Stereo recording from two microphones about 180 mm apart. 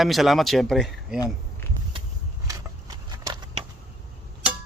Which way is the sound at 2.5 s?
20° right (ahead or behind).